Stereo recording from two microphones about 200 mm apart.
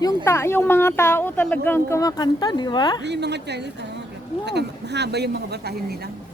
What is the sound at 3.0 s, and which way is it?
A woman's voice, 55° right (ahead or behind).